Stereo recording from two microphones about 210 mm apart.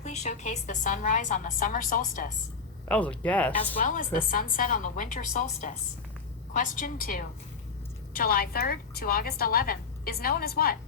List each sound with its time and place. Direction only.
0.0 s a woman's voice: 35° left (ahead or behind)
2.9 s speech: 5° left (ahead or behind)
3.8 s a woman's voice: 40° left (ahead or behind)